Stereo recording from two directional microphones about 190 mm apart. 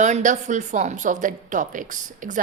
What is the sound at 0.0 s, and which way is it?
A woman's voice, 40° right (ahead or behind).